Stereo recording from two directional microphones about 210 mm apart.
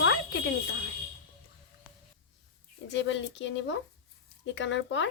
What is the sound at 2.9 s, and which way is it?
Speech, 60° left (ahead or behind).